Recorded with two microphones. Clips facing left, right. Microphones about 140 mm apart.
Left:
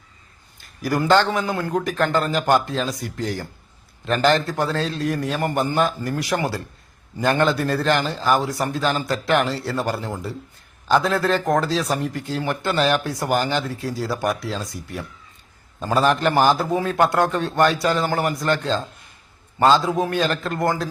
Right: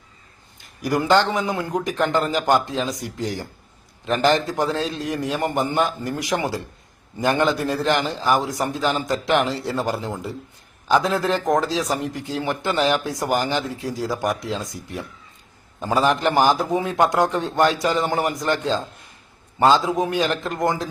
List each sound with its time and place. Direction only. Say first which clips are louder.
0.8 s a man's voice: even; 20° right (ahead or behind)